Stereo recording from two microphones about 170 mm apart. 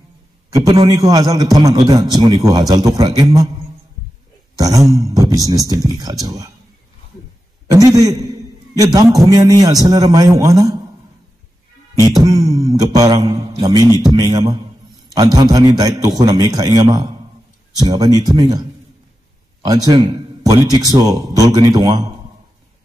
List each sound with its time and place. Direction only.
0.7 s a man's voice: 25° right (ahead or behind)
4.6 s a man's voice: 20° right (ahead or behind)
7.7 s a man's voice: 20° right (ahead or behind)
12.1 s a man's voice: 20° right (ahead or behind)